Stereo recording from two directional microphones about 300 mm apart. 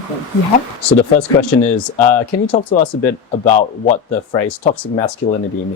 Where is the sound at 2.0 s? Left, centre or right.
Centre.